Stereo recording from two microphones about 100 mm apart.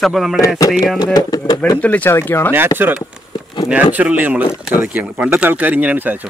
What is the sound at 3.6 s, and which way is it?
Speech, 15° right (ahead or behind).